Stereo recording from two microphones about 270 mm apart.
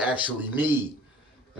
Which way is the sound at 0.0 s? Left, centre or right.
Centre.